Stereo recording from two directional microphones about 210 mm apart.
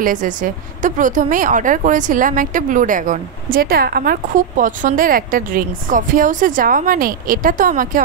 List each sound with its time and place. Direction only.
0.0 s a woman's voice: 40° right (ahead or behind)